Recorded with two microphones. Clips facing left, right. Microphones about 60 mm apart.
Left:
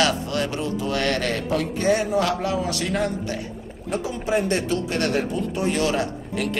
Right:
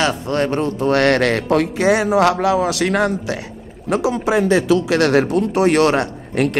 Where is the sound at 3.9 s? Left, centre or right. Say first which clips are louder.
Right 7 dB; right.